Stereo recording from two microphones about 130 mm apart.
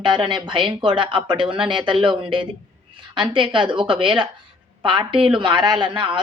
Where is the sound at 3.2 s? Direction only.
40° right (ahead or behind).